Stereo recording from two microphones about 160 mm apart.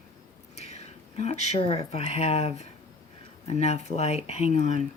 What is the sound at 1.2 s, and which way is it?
Speech, 45° left (ahead or behind).